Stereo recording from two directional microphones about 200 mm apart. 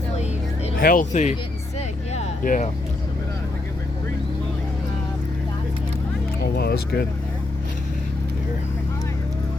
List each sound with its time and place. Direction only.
0.8 s speech: 45° left (ahead or behind)
2.1 s a sound: 40° left (ahead or behind)
6.4 s music: 55° left (ahead or behind)